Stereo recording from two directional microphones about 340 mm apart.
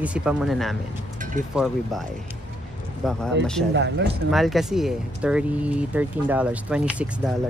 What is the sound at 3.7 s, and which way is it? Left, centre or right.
Speech, right.